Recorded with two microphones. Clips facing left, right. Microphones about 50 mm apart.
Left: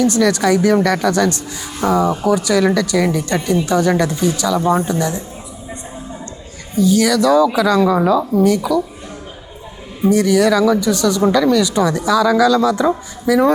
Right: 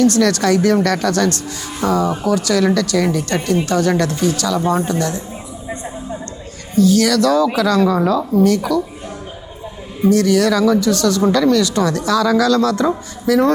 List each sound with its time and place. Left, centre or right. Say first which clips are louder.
0.0 s speech: even; centre
6.7 s speech: right 1 dB; centre
10.0 s speech: even; centre